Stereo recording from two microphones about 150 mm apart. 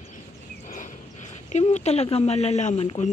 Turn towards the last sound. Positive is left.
turn(degrees=45)  # may be behind; listen again after turning